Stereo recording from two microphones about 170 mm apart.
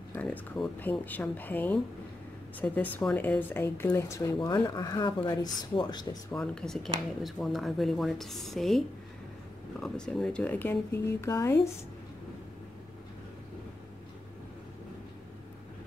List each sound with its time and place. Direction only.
0.1 s speech: 10° left (ahead or behind); by 6.0 s 25° left (ahead or behind)
6.3 s a woman's voice: 5° left (ahead or behind)